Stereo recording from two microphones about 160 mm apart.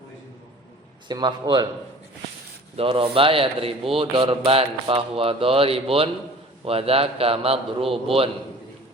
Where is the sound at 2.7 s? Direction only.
35° right (ahead or behind).